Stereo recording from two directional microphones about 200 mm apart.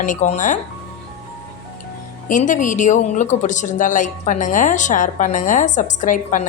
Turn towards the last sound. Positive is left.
turn(degrees=40)  # may be behind; listen again after turning